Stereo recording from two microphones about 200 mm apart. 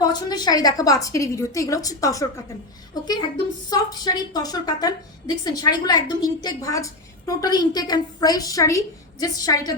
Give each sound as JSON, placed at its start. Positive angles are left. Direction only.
{"t": 0.1, "sound": "a woman's voice", "side_deg": 20}